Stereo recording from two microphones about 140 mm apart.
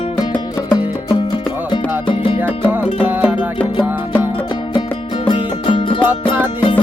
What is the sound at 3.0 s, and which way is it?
Music, 15° right (ahead or behind).